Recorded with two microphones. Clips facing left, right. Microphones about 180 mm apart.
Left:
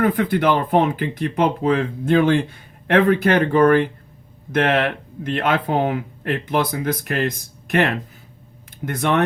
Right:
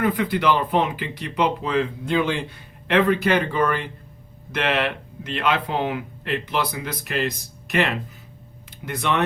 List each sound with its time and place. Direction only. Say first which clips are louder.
0.0 s speech: left 3 dB; 50° left (ahead or behind)